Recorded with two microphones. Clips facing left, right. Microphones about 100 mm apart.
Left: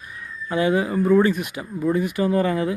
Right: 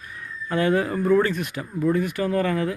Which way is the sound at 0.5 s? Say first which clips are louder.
Left 1 dB; 10° left (ahead or behind).